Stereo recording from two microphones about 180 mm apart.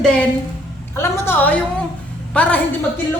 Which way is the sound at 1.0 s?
15° left (ahead or behind).